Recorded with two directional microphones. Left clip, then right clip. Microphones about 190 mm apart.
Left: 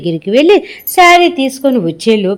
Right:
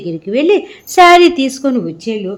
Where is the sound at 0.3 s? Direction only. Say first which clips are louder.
Left 4 dB; 10° left (ahead or behind).